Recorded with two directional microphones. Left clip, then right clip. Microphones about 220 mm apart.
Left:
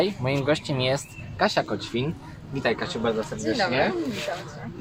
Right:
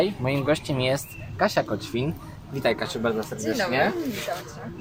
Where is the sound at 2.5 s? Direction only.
25° right (ahead or behind).